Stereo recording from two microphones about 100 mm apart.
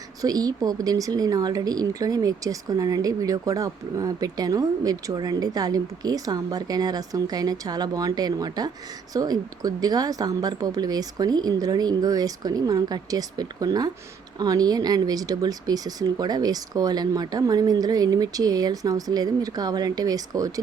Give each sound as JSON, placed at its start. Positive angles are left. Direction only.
{"t": 0.2, "sound": "speech", "side_deg": -40}